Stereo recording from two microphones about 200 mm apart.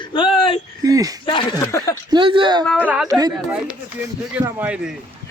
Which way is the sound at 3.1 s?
20° right (ahead or behind).